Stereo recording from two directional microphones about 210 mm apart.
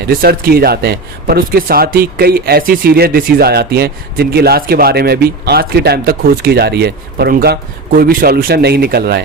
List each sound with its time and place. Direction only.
0.1 s speech: 45° right (ahead or behind)